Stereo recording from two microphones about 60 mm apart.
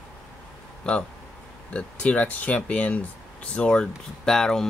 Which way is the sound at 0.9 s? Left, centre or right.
Centre.